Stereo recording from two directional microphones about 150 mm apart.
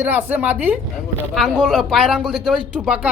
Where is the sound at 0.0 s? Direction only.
10° right (ahead or behind).